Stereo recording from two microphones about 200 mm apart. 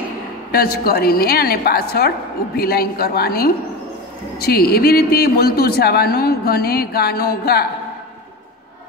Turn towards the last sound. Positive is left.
turn(degrees=50)  # may be behind; listen again after turning